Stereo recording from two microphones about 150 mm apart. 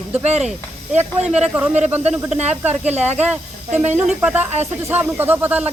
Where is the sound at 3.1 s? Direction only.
10° right (ahead or behind).